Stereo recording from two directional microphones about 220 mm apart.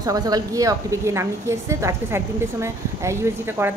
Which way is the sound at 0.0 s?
15° right (ahead or behind).